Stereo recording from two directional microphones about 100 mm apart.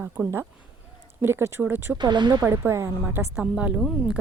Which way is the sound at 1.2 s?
25° right (ahead or behind).